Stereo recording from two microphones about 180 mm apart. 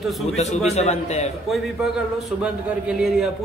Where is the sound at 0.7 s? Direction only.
40° left (ahead or behind).